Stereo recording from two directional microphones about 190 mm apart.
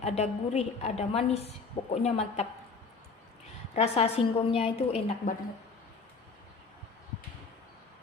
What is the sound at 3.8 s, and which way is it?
A woman's voice, 35° left (ahead or behind).